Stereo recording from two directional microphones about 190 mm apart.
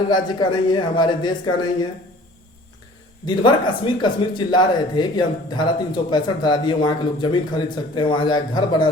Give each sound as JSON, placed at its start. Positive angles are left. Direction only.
{"t": 0.1, "sound": "speech", "side_deg": 25}
{"t": 3.2, "sound": "speech", "side_deg": 25}